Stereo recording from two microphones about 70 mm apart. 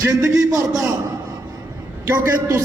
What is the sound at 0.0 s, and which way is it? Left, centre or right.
Speech, right.